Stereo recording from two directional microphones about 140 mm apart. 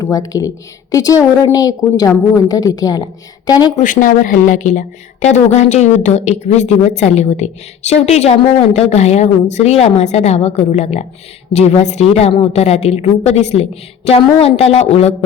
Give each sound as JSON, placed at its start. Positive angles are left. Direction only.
{"t": 0.0, "sound": "a woman's voice", "side_deg": 25}
{"t": 3.8, "sound": "a woman's voice", "side_deg": 70}